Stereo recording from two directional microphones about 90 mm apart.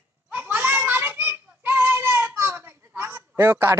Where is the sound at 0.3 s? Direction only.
20° right (ahead or behind).